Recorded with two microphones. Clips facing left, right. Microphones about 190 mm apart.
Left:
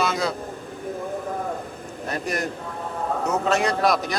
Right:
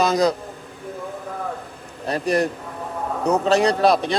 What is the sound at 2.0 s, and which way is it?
A man's voice, 30° right (ahead or behind).